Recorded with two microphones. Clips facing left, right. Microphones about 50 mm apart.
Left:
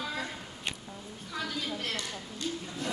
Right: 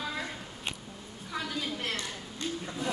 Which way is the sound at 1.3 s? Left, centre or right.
Centre.